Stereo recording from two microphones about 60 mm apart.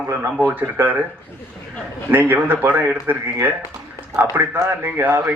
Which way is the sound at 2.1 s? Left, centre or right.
Right.